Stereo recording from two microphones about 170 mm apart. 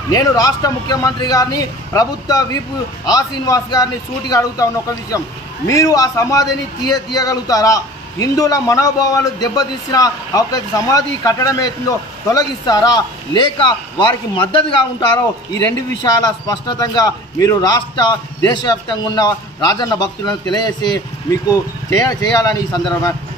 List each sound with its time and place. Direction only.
0.1 s a man's voice: 20° left (ahead or behind)
5.7 s a man's voice: 20° left (ahead or behind)